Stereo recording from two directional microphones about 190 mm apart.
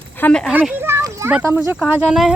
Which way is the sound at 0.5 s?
10° right (ahead or behind).